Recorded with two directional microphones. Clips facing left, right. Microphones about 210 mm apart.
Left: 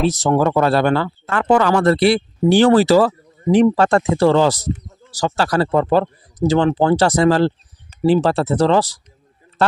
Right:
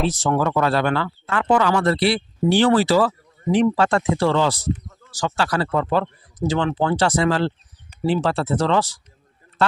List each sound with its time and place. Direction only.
0.1 s speech: 40° left (ahead or behind)